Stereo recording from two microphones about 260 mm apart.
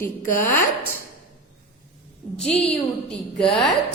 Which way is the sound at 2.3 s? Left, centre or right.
Centre.